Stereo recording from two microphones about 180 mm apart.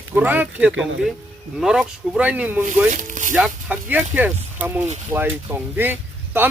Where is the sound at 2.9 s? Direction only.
45° right (ahead or behind).